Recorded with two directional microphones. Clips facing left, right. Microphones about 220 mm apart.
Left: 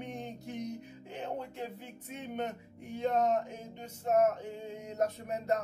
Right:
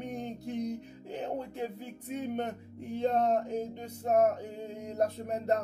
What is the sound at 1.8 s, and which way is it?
Music, 40° right (ahead or behind).